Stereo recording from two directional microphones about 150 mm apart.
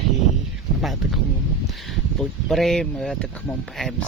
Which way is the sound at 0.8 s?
Centre (ahead or behind).